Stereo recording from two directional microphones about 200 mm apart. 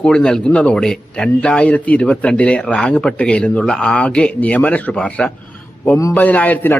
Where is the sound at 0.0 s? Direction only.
5° left (ahead or behind).